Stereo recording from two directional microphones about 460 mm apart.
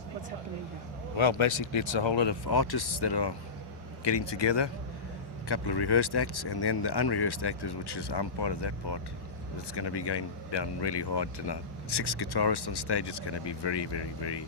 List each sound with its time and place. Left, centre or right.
1.1 s speech: left